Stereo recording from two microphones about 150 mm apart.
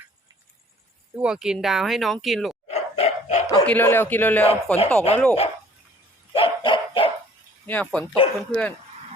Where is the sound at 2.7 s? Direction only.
45° left (ahead or behind).